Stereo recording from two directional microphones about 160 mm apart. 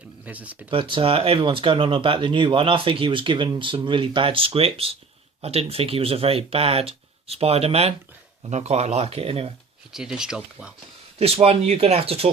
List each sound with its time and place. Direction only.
0.3 s speech: 10° right (ahead or behind)
0.7 s speech: 30° right (ahead or behind)
9.9 s speech: 5° right (ahead or behind)
11.2 s speech: 40° right (ahead or behind)